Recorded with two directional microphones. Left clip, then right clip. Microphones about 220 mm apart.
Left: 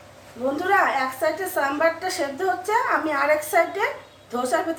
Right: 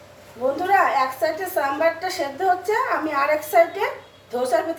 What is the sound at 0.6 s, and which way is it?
A woman's voice, 20° left (ahead or behind).